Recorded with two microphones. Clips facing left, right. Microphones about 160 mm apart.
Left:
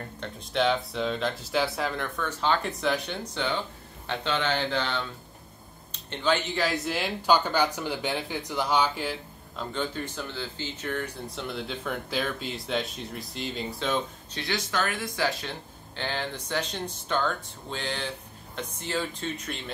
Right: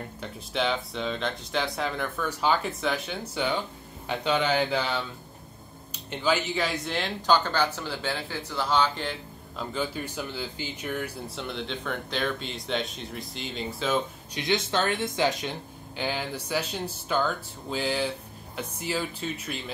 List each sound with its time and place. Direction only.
0.2 s speech: centre (ahead or behind)
9.6 s speech: 5° right (ahead or behind)
14.3 s speech: 20° right (ahead or behind)
16.0 s speech: 10° right (ahead or behind)